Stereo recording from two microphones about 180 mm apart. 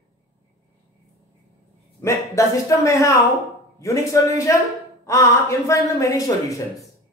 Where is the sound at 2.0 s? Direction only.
15° left (ahead or behind).